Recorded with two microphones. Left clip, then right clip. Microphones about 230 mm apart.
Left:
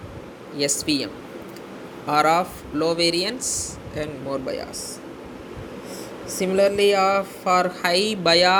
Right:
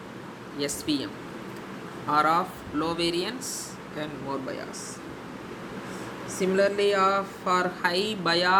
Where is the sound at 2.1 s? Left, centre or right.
Centre.